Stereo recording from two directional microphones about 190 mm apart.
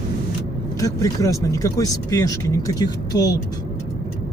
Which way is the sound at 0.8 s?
15° left (ahead or behind).